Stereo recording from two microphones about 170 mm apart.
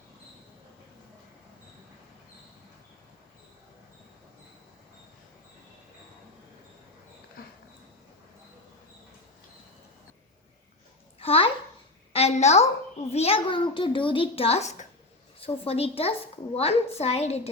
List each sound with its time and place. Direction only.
11.2 s a child's voice: 35° left (ahead or behind)